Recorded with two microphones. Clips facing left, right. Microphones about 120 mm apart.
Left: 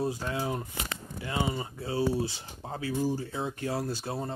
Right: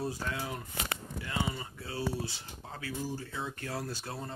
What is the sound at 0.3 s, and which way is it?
Speech, 30° left (ahead or behind).